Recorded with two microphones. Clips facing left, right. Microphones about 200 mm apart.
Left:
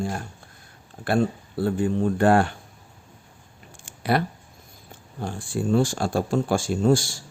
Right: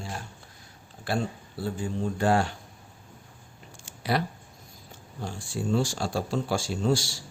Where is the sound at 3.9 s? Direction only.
55° left (ahead or behind).